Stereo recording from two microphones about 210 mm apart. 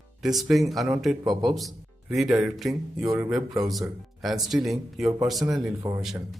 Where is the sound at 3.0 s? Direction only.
15° right (ahead or behind).